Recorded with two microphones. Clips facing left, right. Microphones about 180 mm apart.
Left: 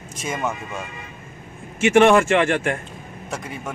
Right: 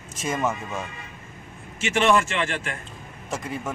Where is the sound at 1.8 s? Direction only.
55° left (ahead or behind).